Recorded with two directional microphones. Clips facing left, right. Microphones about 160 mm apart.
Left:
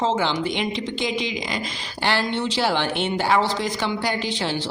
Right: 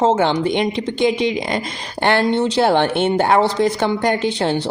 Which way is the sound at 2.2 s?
40° right (ahead or behind).